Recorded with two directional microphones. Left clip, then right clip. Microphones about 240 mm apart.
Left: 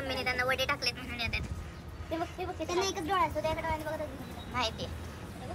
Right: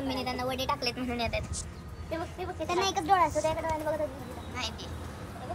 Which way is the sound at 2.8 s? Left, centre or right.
Right.